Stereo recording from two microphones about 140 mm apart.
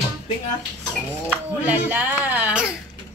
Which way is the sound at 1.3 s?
15° right (ahead or behind).